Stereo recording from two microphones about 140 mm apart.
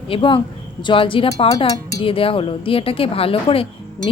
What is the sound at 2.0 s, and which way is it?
A woman's voice, 40° left (ahead or behind).